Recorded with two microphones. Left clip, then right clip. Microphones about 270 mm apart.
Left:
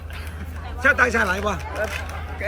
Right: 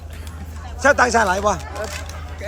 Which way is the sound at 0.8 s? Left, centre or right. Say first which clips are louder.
Right 3 dB; centre.